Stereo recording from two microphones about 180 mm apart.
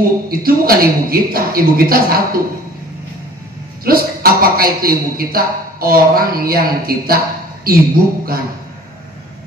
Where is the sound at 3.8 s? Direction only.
55° right (ahead or behind).